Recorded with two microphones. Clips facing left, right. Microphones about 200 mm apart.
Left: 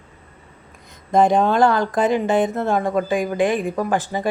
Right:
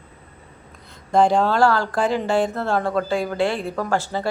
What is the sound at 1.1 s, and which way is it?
Speech, 20° left (ahead or behind).